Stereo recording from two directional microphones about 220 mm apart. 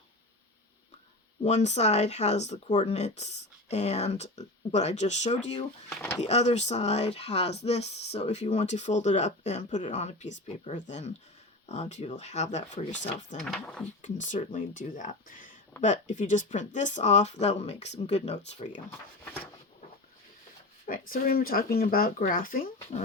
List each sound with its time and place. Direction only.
1.5 s speech: 30° left (ahead or behind)
5.9 s a sound: 5° left (ahead or behind)
6.1 s speech: 30° left (ahead or behind)
13.4 s speech: 5° left (ahead or behind)
14.0 s speech: 35° left (ahead or behind)
19.2 s a sound: 5° left (ahead or behind)
21.1 s speech: 40° left (ahead or behind)